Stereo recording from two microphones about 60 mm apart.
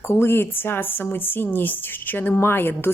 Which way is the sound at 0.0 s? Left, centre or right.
Left.